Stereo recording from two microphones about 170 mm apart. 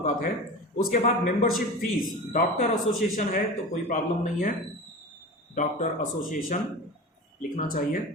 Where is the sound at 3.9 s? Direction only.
50° left (ahead or behind).